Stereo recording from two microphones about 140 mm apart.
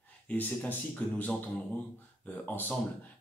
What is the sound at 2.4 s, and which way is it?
Speech, 15° left (ahead or behind).